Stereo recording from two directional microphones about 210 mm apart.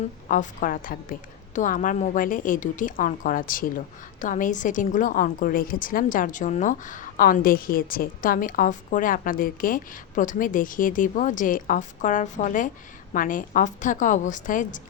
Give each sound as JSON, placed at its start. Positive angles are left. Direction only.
{"t": 0.3, "sound": "a woman's voice", "side_deg": 40}